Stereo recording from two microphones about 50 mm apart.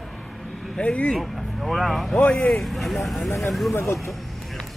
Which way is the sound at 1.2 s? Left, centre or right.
Centre.